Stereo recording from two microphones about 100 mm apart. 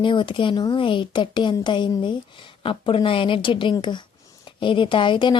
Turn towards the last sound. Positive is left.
turn(degrees=50)  # may be behind; listen again after turning